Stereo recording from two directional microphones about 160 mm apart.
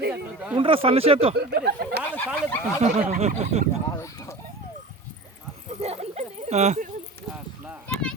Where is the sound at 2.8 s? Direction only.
45° right (ahead or behind).